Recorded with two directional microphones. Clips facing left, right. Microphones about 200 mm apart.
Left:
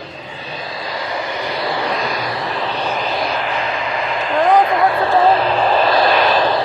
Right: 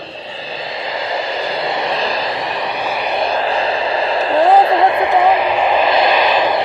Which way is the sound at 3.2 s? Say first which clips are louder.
Right 4 dB; 30° right (ahead or behind).